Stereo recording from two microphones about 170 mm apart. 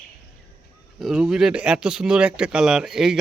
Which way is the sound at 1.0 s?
5° right (ahead or behind).